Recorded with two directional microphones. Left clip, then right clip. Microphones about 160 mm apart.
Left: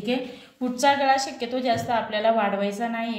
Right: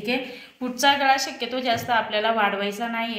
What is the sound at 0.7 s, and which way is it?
A woman's voice, 45° left (ahead or behind).